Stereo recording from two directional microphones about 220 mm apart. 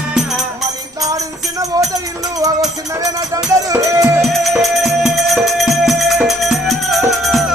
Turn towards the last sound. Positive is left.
turn(degrees=0)  # may be behind; listen again after turning